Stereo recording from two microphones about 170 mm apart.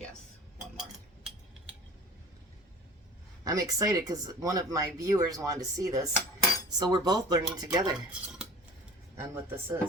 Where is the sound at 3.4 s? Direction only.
20° right (ahead or behind).